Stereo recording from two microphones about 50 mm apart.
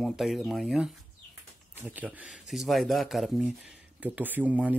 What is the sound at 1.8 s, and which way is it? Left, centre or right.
Speech, right.